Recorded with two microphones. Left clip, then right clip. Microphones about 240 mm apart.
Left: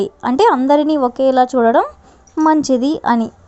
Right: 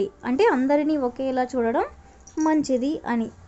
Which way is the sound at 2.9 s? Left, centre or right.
Left.